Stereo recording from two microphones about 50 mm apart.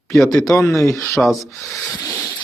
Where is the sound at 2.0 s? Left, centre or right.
Left.